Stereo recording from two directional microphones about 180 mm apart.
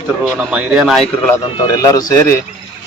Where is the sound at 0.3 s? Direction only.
5° right (ahead or behind).